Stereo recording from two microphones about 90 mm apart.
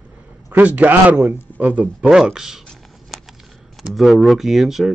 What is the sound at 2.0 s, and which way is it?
Speech, 5° right (ahead or behind).